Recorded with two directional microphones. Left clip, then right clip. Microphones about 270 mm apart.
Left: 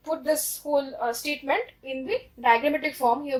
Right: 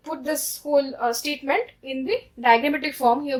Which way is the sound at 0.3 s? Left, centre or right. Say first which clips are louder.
Right 2 dB; right.